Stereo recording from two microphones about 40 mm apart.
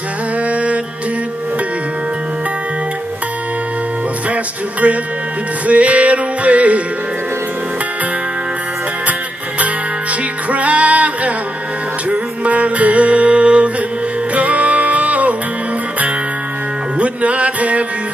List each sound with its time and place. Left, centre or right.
0.5 s music: right
4.3 s music: right
10.5 s music: right
17.0 s music: right